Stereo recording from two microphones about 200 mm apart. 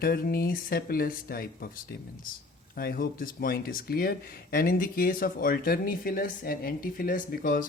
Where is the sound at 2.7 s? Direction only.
45° left (ahead or behind).